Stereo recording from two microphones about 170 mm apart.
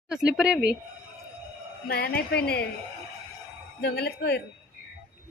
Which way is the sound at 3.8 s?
70° left (ahead or behind).